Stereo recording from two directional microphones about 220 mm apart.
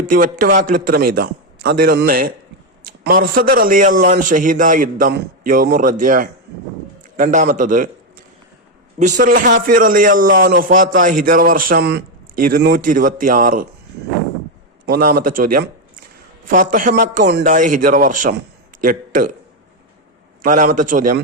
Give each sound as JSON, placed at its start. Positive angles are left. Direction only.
{"t": 0.1, "sound": "a man's voice", "side_deg": -40}
{"t": 9.0, "sound": "a man's voice", "side_deg": -35}
{"t": 14.8, "sound": "a man's voice", "side_deg": -40}
{"t": 20.4, "sound": "a man's voice", "side_deg": -35}